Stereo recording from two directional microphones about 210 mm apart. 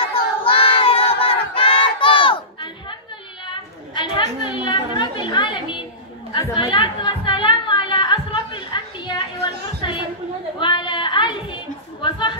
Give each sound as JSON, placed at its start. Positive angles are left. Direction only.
{"t": 0.4, "sound": "battle cry", "side_deg": 25}
{"t": 3.9, "sound": "chatter", "side_deg": 25}
{"t": 4.2, "sound": "chatter", "side_deg": -35}
{"t": 4.5, "sound": "a sound", "side_deg": 20}
{"t": 10.6, "sound": "music", "side_deg": 20}
{"t": 12.0, "sound": "chatter", "side_deg": 25}